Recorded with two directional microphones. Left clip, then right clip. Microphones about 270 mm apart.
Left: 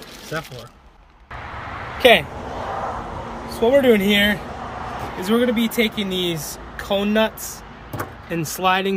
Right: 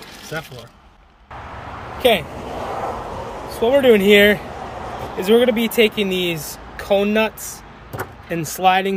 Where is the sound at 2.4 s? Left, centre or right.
Right.